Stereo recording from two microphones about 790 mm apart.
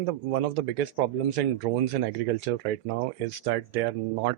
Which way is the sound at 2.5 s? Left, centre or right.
Right.